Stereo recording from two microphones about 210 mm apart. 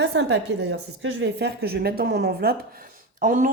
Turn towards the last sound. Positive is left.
turn(degrees=-40)  # may be behind; listen again after turning